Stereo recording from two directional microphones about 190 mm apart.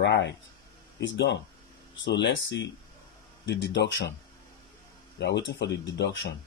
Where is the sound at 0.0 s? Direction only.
65° left (ahead or behind).